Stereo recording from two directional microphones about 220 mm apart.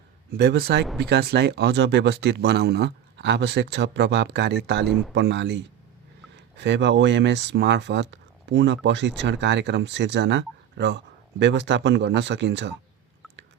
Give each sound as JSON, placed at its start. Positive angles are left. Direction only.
{"t": 0.3, "sound": "speech", "side_deg": -45}